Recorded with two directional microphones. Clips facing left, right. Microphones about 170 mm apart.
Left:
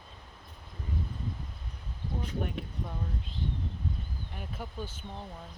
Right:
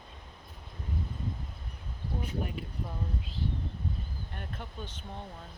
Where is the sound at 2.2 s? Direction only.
Centre (ahead or behind).